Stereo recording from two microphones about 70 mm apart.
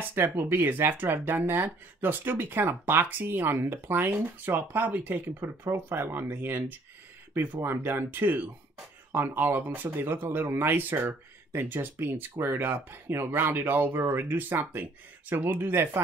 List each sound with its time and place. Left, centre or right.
0.1 s speech: right